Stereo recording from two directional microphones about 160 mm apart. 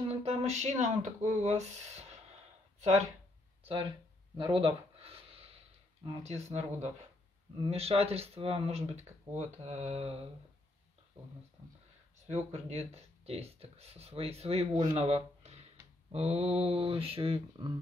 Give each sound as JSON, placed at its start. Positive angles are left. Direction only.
{"t": 0.2, "sound": "speech", "side_deg": -40}
{"t": 4.4, "sound": "a sound", "side_deg": -35}
{"t": 6.2, "sound": "speech", "side_deg": -45}
{"t": 9.3, "sound": "speech", "side_deg": -20}
{"t": 9.6, "sound": "speech", "side_deg": -45}
{"t": 12.4, "sound": "speech", "side_deg": -45}